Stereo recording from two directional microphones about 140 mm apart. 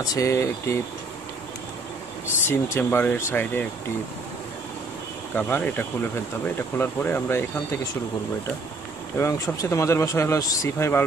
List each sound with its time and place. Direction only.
0.0 s speech: 25° left (ahead or behind)
2.4 s speech: 15° left (ahead or behind)
5.3 s speech: 15° left (ahead or behind)
9.2 s speech: 20° left (ahead or behind)